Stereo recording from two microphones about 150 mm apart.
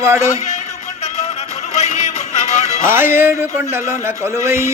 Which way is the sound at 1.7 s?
50° left (ahead or behind).